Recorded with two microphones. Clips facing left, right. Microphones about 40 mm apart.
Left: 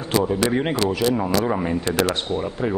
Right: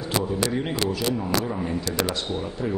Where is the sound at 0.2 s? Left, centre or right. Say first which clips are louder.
Left 5 dB; left.